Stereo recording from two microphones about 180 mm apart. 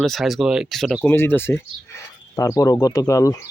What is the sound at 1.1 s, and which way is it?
Speech, 15° left (ahead or behind).